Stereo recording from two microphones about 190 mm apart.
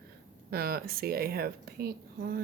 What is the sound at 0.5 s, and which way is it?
Speech, 55° right (ahead or behind).